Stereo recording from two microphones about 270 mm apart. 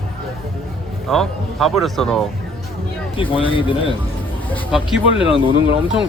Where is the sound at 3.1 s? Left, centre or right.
Centre.